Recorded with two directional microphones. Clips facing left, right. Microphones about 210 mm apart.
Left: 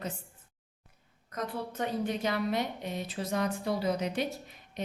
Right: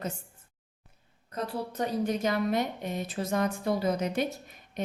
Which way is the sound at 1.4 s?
40° right (ahead or behind).